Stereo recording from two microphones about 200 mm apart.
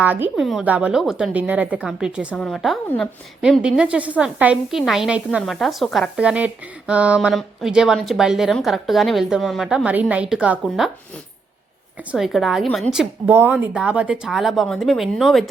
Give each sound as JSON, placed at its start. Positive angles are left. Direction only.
{"t": 0.0, "sound": "a woman's voice", "side_deg": -10}
{"t": 12.1, "sound": "a woman's voice", "side_deg": 0}